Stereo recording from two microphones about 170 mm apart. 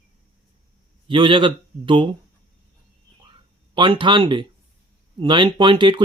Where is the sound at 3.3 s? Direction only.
30° right (ahead or behind).